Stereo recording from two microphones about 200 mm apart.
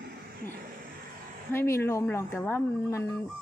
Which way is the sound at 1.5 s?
10° left (ahead or behind).